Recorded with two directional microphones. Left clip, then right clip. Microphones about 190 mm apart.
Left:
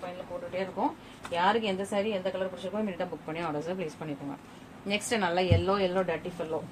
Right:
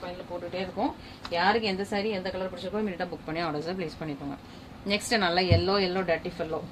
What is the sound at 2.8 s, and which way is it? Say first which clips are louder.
A woman's voice: right 1 dB; 30° right (ahead or behind).